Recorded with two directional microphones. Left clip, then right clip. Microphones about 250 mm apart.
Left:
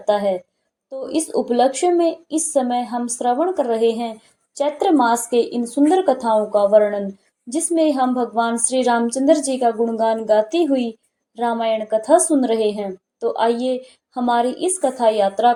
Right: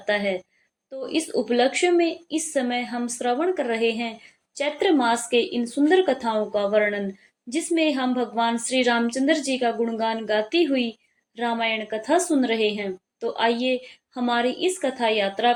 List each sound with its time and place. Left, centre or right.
0.0 s a woman's voice: left